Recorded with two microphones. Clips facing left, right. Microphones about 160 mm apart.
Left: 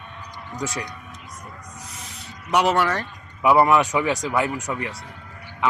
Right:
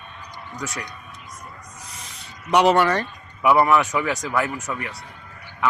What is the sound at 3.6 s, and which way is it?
A man's voice, 15° left (ahead or behind).